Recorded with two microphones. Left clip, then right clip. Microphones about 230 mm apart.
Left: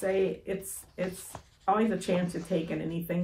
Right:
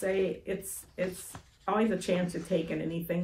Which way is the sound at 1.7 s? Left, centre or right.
Centre.